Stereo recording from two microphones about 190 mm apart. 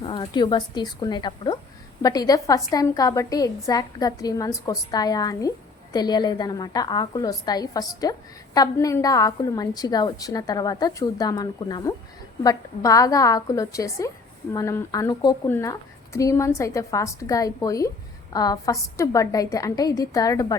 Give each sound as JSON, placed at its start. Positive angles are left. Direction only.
{"t": 0.0, "sound": "a woman's voice", "side_deg": 25}